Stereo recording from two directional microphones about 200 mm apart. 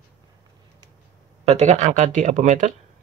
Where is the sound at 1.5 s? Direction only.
35° right (ahead or behind).